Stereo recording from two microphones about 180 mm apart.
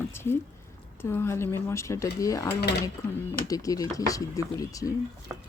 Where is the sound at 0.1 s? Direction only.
15° left (ahead or behind).